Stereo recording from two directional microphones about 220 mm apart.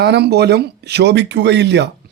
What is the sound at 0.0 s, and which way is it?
Speech, 50° right (ahead or behind).